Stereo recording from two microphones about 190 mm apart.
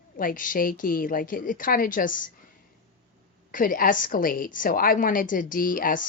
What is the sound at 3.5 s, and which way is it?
A woman's voice, 45° left (ahead or behind).